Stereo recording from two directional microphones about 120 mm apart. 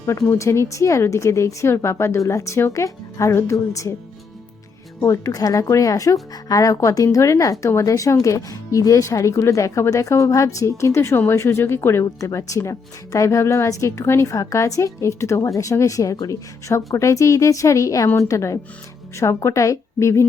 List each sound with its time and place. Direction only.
0.0 s speech: 25° left (ahead or behind)
4.9 s speech: 25° left (ahead or behind)